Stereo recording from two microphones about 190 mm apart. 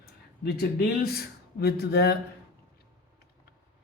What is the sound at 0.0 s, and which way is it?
Speech, 55° left (ahead or behind).